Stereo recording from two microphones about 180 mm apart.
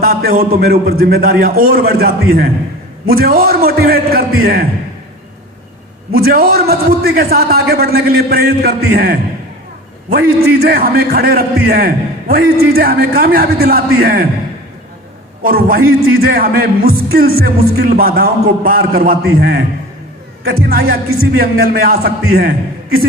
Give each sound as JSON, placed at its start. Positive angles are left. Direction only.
{"t": 0.0, "sound": "a man's voice", "side_deg": -60}
{"t": 6.1, "sound": "a man's voice", "side_deg": -60}
{"t": 15.4, "sound": "a man's voice", "side_deg": -55}